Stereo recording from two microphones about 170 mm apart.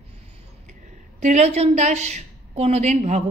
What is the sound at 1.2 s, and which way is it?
A woman's voice, 45° right (ahead or behind).